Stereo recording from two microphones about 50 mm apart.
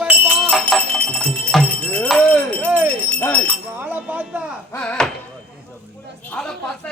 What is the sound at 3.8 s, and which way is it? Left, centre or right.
Speech, right.